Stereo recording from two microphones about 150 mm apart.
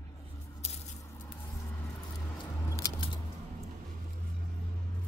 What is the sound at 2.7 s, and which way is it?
Scissors, 20° left (ahead or behind).